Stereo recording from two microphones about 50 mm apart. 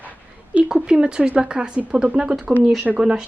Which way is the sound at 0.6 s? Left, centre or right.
Centre.